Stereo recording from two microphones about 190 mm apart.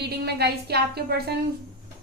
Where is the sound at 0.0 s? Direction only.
60° right (ahead or behind).